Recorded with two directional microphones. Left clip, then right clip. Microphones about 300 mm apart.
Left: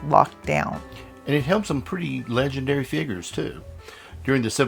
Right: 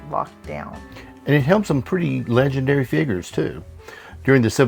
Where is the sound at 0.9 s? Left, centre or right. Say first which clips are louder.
Right 6 dB; right.